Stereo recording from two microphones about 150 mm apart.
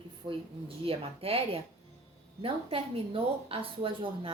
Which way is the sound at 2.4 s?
40° right (ahead or behind).